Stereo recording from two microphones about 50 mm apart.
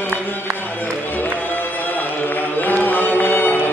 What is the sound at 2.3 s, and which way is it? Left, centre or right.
Chant, left.